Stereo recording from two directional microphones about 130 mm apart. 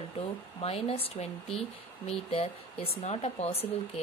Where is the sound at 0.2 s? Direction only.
50° left (ahead or behind).